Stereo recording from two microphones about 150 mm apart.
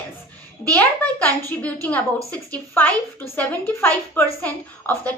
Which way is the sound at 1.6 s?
10° left (ahead or behind).